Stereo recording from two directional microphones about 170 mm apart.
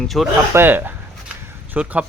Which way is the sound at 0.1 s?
Centre (ahead or behind).